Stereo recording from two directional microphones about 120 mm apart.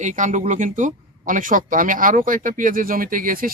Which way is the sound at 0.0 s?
90° right.